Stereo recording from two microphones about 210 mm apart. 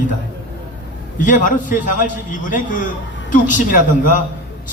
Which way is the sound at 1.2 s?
40° left (ahead or behind).